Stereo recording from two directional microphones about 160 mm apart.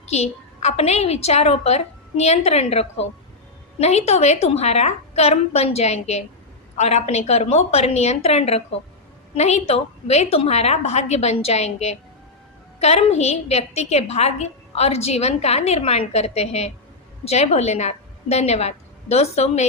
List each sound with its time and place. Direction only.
0.1 s a woman's voice: 40° left (ahead or behind)